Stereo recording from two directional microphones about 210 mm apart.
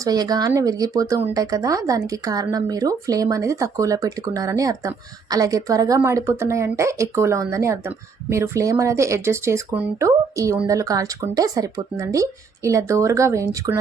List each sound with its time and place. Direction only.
0.0 s speech: 20° right (ahead or behind)